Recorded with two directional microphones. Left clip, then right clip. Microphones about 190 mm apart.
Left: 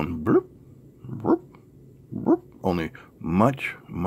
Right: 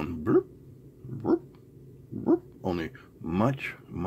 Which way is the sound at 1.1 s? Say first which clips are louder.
Left 4 dB; 25° left (ahead or behind).